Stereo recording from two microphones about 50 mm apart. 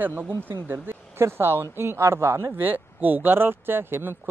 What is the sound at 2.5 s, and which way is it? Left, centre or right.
Speech, right.